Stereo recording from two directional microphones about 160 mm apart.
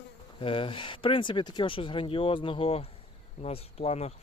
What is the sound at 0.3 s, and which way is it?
Bee, 35° left (ahead or behind).